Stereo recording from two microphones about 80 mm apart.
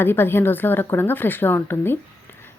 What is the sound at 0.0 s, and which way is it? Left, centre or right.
Speech, left.